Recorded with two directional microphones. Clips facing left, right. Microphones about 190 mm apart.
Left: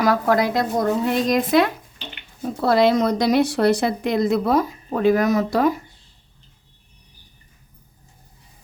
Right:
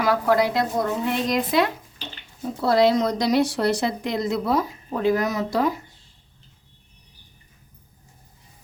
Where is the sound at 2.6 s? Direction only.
55° left (ahead or behind).